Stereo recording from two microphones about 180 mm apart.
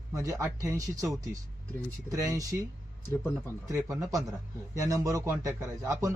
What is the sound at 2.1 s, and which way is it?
Speech, 20° right (ahead or behind).